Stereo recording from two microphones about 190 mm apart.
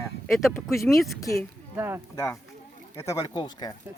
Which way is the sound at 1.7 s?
10° right (ahead or behind).